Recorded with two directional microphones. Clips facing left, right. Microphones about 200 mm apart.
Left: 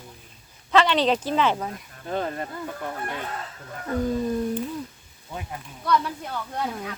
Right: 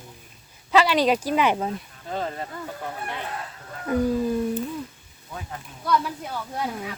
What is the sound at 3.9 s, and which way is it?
Speech, 15° right (ahead or behind).